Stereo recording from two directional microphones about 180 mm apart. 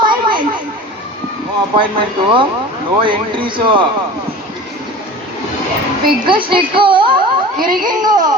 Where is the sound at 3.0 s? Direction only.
25° right (ahead or behind).